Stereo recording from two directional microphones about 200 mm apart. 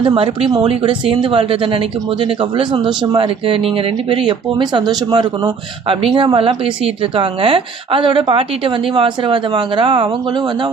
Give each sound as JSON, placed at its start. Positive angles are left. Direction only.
{"t": 0.0, "sound": "a woman's voice", "side_deg": -20}